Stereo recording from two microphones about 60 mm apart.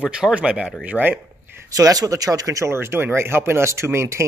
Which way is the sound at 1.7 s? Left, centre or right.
Right.